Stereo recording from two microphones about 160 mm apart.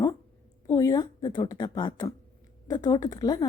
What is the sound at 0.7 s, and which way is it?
A woman's voice, 20° left (ahead or behind).